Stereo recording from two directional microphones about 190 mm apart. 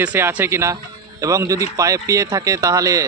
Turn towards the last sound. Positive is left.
turn(degrees=-15)  # may be behind; listen again after turning